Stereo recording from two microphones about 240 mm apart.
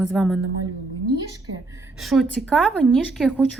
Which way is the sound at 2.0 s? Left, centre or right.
Centre.